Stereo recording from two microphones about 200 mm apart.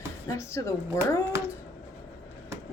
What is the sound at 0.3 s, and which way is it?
Speech, 15° left (ahead or behind).